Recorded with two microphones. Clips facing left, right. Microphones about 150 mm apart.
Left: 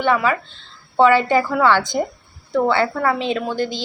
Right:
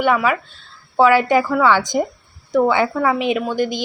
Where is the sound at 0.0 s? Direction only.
10° right (ahead or behind).